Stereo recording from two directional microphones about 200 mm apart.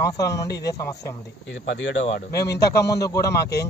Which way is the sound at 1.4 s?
65° left (ahead or behind).